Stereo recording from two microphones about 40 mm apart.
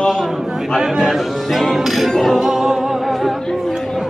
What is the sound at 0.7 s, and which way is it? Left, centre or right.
Speech, centre.